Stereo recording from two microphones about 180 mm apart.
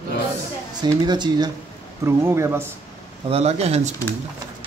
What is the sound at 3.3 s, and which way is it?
Speech, 35° right (ahead or behind).